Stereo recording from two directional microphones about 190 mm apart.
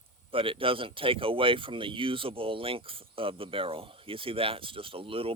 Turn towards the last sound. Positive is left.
turn(degrees=-30)  # may be behind; listen again after turning